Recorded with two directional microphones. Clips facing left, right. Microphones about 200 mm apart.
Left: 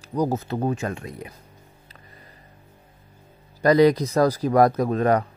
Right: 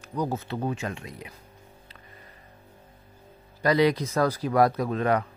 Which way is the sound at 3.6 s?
45° left (ahead or behind).